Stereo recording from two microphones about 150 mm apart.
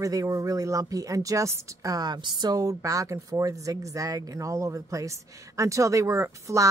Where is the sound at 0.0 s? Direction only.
20° right (ahead or behind).